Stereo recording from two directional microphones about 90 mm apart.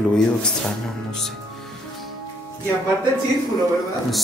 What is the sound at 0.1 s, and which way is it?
Speech, 5° left (ahead or behind).